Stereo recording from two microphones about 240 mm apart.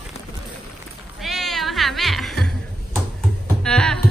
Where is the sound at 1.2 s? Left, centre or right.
Centre.